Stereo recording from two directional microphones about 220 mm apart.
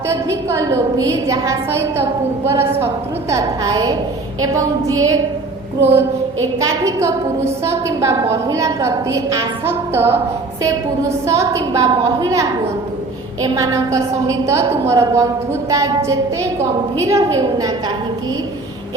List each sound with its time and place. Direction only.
0.1 s a woman's voice: 15° right (ahead or behind)
11.3 s a woman's voice: 15° right (ahead or behind)